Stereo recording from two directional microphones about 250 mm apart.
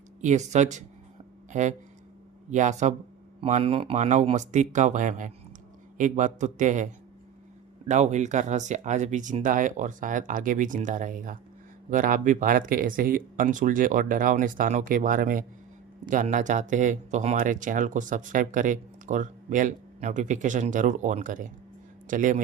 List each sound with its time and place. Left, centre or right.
0.2 s speech: right
7.9 s speech: right